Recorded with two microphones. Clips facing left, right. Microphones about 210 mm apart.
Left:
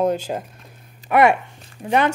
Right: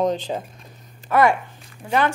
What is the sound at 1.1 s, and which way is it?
Speech, 25° left (ahead or behind).